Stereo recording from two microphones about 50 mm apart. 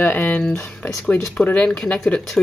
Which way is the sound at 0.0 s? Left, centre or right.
Left.